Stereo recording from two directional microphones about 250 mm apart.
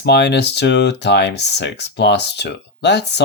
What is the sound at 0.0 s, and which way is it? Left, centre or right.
Speech, left.